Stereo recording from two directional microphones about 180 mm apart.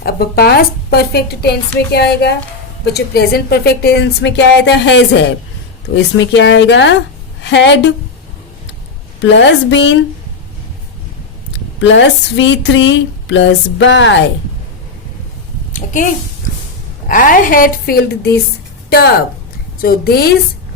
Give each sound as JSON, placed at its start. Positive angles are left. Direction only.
{"t": 0.0, "sound": "a woman's voice", "side_deg": 60}
{"t": 7.4, "sound": "a woman's voice", "side_deg": 75}
{"t": 9.2, "sound": "speech", "side_deg": 85}
{"t": 11.8, "sound": "speech", "side_deg": 90}
{"t": 15.7, "sound": "a sound", "side_deg": 45}
{"t": 17.1, "sound": "a woman's voice", "side_deg": 50}